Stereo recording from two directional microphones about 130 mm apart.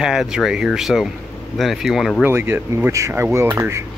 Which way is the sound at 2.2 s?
15° right (ahead or behind).